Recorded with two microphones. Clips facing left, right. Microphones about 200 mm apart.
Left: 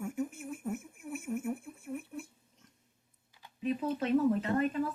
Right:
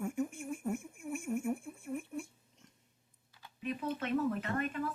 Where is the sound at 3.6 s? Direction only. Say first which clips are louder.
Left 5 dB; 30° left (ahead or behind).